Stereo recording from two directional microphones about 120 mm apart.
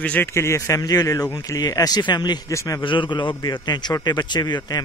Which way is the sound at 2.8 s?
45° left (ahead or behind).